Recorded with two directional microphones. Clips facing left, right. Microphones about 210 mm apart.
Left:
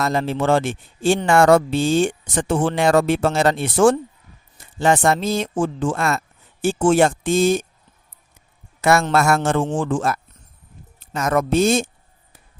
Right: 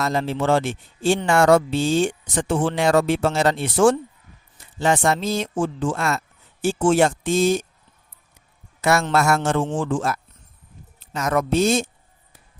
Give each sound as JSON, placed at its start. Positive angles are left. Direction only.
{"t": 0.0, "sound": "speech", "side_deg": 55}
{"t": 8.8, "sound": "speech", "side_deg": 55}